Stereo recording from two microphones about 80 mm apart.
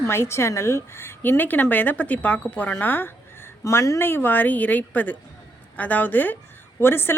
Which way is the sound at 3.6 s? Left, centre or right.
Left.